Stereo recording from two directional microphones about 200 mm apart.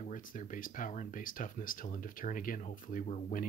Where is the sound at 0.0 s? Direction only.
40° left (ahead or behind).